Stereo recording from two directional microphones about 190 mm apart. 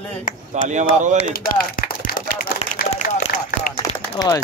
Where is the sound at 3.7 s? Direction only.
20° left (ahead or behind).